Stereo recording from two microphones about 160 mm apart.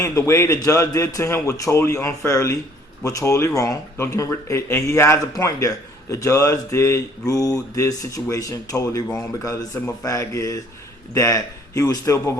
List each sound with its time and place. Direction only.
0.0 s speech: 20° left (ahead or behind)